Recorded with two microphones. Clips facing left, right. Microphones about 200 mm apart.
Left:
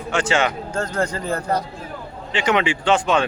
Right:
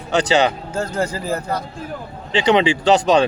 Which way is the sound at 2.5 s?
35° right (ahead or behind).